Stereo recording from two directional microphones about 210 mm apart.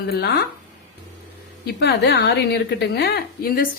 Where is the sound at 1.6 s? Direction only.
50° left (ahead or behind).